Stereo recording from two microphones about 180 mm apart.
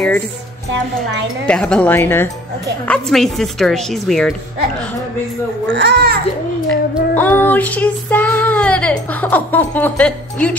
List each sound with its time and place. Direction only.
1.5 s child singing: 5° left (ahead or behind)
2.9 s speech: centre (ahead or behind)
5.8 s a child's voice: 65° right (ahead or behind)
7.2 s child singing: 10° left (ahead or behind)